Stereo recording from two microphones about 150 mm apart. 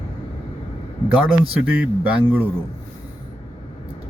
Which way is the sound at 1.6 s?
10° right (ahead or behind).